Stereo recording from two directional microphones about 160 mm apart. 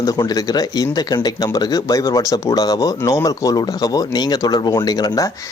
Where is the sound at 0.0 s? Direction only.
20° left (ahead or behind).